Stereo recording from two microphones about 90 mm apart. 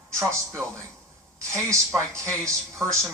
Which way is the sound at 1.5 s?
30° right (ahead or behind).